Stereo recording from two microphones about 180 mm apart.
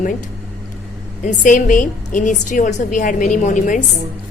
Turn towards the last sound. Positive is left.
turn(degrees=45)  # may be behind; listen again after turning